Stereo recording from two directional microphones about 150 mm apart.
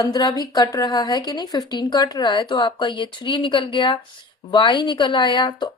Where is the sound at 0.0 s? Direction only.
25° left (ahead or behind).